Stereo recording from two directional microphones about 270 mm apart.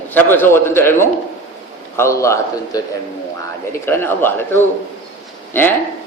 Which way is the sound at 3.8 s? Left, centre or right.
Centre.